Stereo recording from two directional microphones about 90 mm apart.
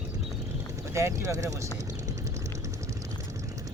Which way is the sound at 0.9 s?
35° right (ahead or behind).